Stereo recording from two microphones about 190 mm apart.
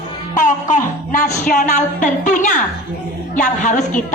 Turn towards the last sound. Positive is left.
turn(degrees=40)  # may be behind; listen again after turning